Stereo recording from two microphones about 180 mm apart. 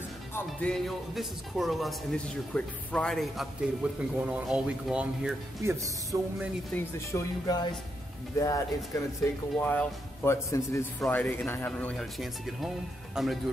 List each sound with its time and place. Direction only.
0.5 s speech: 5° left (ahead or behind)
5.6 s speech: 15° right (ahead or behind)
6.7 s speech: 15° left (ahead or behind); by 13.4 s centre (ahead or behind)